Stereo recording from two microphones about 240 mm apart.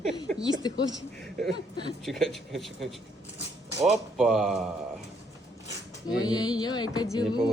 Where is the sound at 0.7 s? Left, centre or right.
Centre.